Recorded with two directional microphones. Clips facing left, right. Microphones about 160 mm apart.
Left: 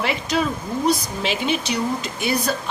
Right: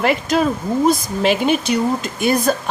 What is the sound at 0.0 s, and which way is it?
Speech, 50° right (ahead or behind).